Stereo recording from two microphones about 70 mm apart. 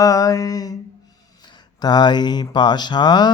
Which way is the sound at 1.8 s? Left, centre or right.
Left.